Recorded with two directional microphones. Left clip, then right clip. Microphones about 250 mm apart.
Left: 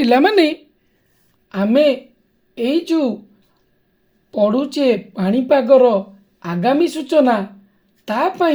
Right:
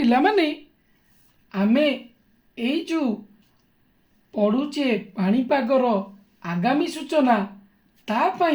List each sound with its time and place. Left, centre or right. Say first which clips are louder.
0.0 s speech: left 6 dB; left
4.3 s speech: left 6 dB; left